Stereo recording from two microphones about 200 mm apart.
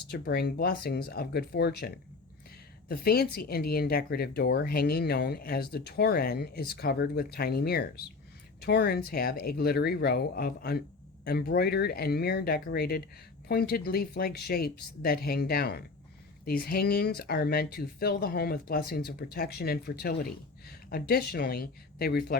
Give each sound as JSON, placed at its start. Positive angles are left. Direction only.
{"t": 0.1, "sound": "speech", "side_deg": 50}
{"t": 2.9, "sound": "speech", "side_deg": 50}